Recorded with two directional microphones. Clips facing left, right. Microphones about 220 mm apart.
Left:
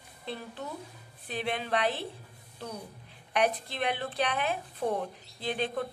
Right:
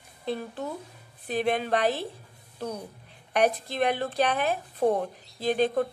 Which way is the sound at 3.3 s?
45° right (ahead or behind).